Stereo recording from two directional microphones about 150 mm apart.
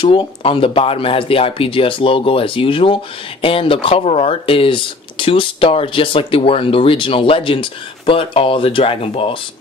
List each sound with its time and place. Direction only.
0.0 s speech: 35° left (ahead or behind)